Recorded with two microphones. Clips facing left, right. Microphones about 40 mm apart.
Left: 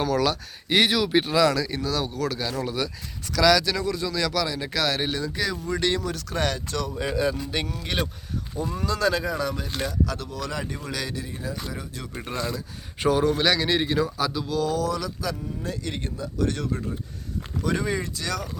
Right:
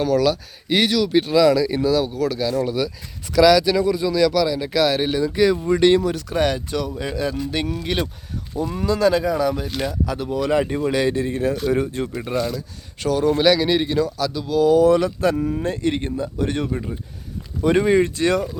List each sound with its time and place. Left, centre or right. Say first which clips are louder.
0.0 s speech: right 5 dB; centre
0.9 s speech: right 4 dB; centre
3.4 s speech: right 6 dB; centre
6.9 s speech: right 1 dB; centre
8.5 s speech: right 5 dB; centre
8.9 s speech: right 7 dB; centre; by 12.1 s right
12.2 s speech: right 6 dB; centre
12.5 s speech: right 4 dB; centre
13.2 s speech: right 5 dB; centre
14.0 s speech: right 3 dB; centre
14.4 s speech: right 14 dB; centre
14.8 s speech: right 11 dB; right
15.4 s speech: right 12 dB; right
15.6 s speech: right 9 dB; right